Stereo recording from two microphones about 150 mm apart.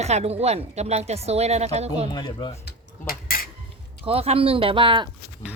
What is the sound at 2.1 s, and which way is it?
Speech, 30° left (ahead or behind).